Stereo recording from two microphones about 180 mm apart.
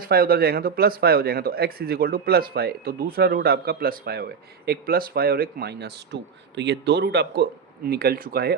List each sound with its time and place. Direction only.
0.0 s speech: 55° right (ahead or behind)